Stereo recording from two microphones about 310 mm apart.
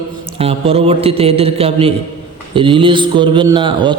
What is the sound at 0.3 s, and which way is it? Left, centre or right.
A man's voice, centre.